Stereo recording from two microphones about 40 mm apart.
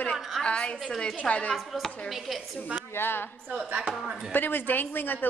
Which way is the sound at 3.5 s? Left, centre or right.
Right.